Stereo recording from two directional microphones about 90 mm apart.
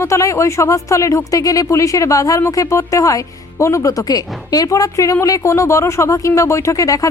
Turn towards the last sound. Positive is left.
turn(degrees=40)  # may be behind; listen again after turning